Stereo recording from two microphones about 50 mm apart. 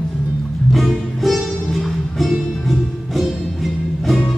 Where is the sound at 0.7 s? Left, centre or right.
Centre.